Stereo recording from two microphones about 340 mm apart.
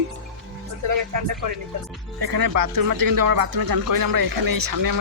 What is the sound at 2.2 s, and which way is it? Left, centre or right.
Speech, right.